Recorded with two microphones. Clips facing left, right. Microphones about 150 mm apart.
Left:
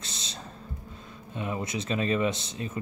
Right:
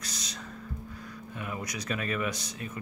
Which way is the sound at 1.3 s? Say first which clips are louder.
Left 6 dB; 25° left (ahead or behind).